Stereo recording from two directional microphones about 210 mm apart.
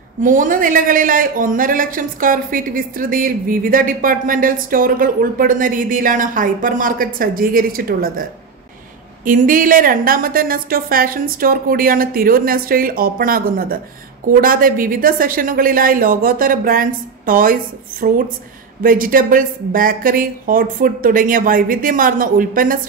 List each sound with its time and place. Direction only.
0.2 s a man's voice: 40° right (ahead or behind)